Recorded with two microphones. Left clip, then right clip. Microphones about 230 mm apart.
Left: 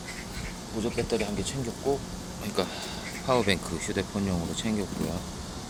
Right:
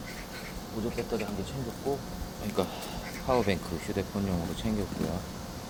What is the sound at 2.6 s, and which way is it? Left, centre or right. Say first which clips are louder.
A man's voice: left 2 dB; centre.